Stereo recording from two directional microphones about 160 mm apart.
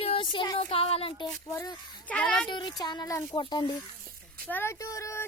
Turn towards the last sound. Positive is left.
turn(degrees=15)  # may be behind; listen again after turning